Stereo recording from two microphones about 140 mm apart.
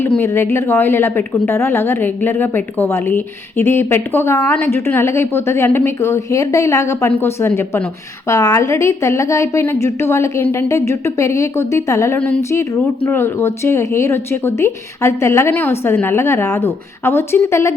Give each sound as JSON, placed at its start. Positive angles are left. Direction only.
{"t": 0.2, "sound": "a woman's voice", "side_deg": 20}